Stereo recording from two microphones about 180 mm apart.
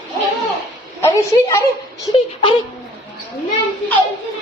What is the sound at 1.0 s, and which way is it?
Speech, 15° left (ahead or behind).